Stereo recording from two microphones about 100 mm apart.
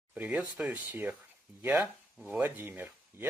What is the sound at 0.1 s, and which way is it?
Speech, 15° right (ahead or behind).